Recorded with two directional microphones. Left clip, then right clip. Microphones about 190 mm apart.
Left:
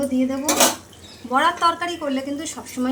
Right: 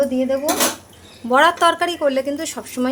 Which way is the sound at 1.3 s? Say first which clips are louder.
Right 4 dB; 60° right (ahead or behind).